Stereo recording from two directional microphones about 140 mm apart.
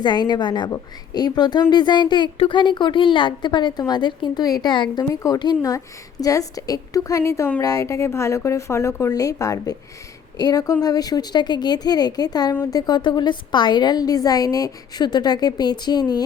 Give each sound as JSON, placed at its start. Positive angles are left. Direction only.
{"t": 0.0, "sound": "a woman's voice", "side_deg": 30}